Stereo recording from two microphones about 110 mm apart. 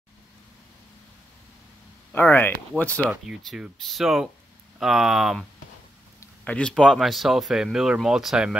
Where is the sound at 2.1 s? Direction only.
20° left (ahead or behind).